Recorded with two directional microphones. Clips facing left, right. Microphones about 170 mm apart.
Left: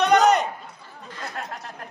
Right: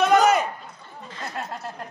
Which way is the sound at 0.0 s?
Centre (ahead or behind).